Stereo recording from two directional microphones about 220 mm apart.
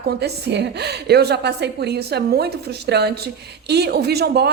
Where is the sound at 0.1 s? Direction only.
50° right (ahead or behind).